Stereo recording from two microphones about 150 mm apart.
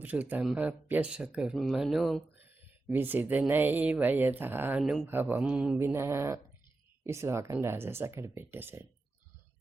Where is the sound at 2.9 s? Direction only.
15° right (ahead or behind).